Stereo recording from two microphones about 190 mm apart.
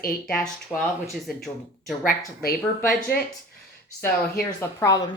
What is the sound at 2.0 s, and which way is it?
Speech, 50° left (ahead or behind).